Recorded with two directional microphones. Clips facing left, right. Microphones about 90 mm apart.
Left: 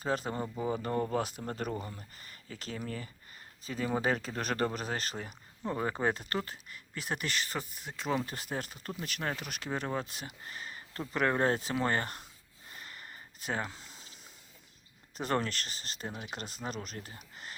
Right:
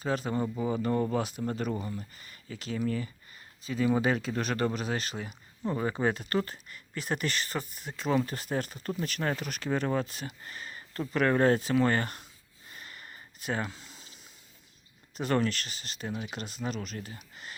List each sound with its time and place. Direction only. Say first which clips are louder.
0.0 s speech: right 3 dB; 30° left (ahead or behind)
6.4 s speech: right 4 dB; 10° left (ahead or behind); by 12.2 s 25° left (ahead or behind)
12.7 s a sound: right 1 dB; 30° left (ahead or behind)
15.1 s speech: right 4 dB; 35° left (ahead or behind)